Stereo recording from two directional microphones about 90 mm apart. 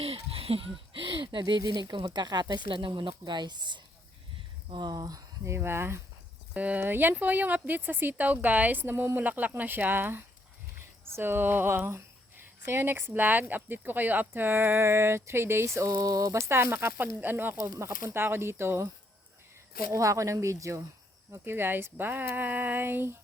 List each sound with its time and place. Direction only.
0.0 s speech: 90° right; by 2.6 s 50° right (ahead or behind)
2.6 s speech: 65° right (ahead or behind); by 5.5 s 40° right (ahead or behind)
5.5 s speech: 25° right (ahead or behind)
6.5 s speech: 15° right (ahead or behind)
15.9 s a sound: 40° right (ahead or behind); by 17.1 s 25° right (ahead or behind)
17.2 s speech: 20° right (ahead or behind)
17.6 s speech: 35° right (ahead or behind)
19.9 s a sound: 35° right (ahead or behind)
21.3 s speech: 25° right (ahead or behind)